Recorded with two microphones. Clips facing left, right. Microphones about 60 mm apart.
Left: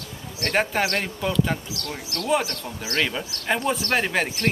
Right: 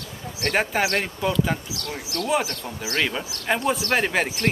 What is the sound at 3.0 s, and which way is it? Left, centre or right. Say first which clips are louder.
A man's voice: even; centre.